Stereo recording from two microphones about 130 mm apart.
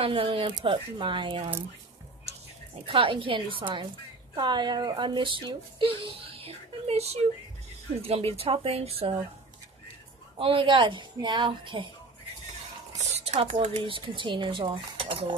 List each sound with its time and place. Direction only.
0.0 s speech: 45° right (ahead or behind)
2.9 s speech: 40° right (ahead or behind)
10.4 s speech: 40° right (ahead or behind)
12.9 s speech: 55° right (ahead or behind)